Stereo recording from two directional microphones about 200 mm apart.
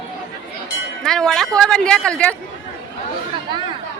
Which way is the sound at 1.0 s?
5° left (ahead or behind).